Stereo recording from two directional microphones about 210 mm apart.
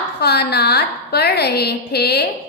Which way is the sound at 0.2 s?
50° left (ahead or behind).